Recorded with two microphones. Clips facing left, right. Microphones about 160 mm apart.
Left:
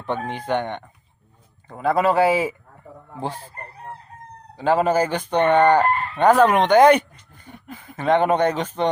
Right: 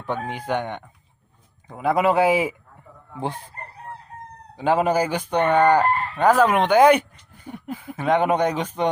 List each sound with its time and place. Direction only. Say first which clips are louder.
0.0 s chicken: left 1 dB; 10° right (ahead or behind)
4.5 s chicken: left 1 dB; 15° right (ahead or behind)
7.4 s a sound: right 7 dB; 10° right (ahead or behind)